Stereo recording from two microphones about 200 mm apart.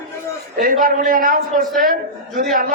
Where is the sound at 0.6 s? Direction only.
45° right (ahead or behind).